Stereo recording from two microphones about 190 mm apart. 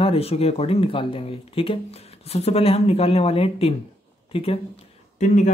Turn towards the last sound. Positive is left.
turn(degrees=40)  # may be behind; listen again after turning